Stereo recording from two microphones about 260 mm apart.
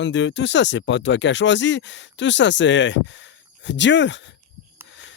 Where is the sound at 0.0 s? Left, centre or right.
Left.